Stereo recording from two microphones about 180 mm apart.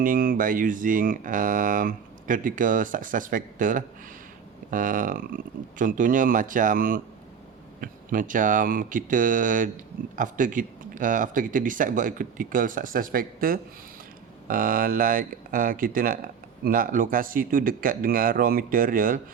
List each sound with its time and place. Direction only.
0.0 s speech: 50° right (ahead or behind)